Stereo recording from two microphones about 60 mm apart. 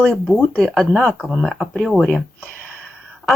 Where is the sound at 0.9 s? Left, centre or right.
Centre.